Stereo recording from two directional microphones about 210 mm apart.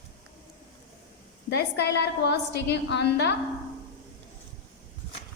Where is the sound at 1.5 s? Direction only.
55° left (ahead or behind).